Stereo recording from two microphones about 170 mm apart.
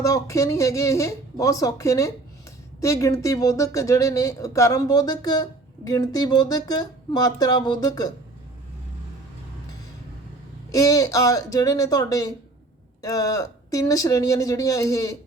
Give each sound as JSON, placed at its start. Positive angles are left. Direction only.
{"t": 0.0, "sound": "speech", "side_deg": 20}
{"t": 10.7, "sound": "speech", "side_deg": 20}